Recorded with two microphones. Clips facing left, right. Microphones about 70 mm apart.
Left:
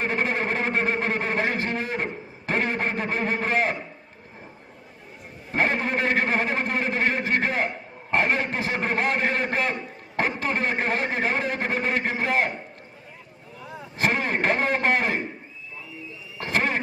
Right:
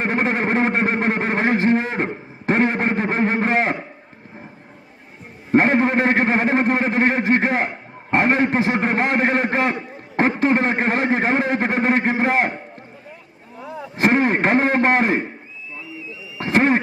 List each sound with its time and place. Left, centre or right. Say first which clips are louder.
0.0 s a man's voice: right 5 dB; right
5.5 s a man's voice: right 8 dB; right
13.9 s a man's voice: right 7 dB; right
16.4 s a sound: right 8 dB; right